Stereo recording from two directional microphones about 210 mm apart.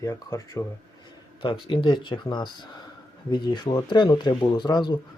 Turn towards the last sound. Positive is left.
turn(degrees=20)  # may be behind; listen again after turning